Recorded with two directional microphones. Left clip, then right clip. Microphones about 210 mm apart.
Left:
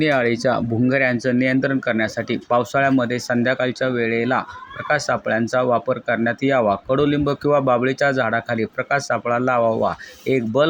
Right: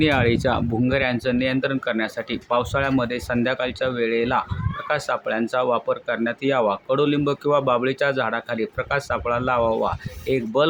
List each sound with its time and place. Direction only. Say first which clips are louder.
0.0 s speech: left 2 dB; centre (ahead or behind)